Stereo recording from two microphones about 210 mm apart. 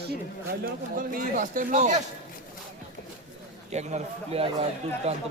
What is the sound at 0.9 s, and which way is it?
Speech, 40° right (ahead or behind).